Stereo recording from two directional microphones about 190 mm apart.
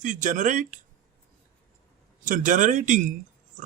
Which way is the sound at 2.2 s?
45° right (ahead or behind).